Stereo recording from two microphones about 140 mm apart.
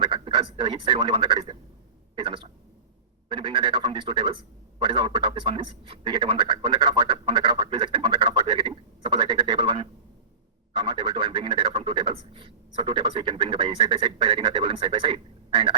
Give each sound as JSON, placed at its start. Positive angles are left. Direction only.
{"t": 0.0, "sound": "speech", "side_deg": -40}